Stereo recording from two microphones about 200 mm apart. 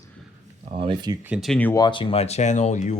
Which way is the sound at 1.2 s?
Centre (ahead or behind).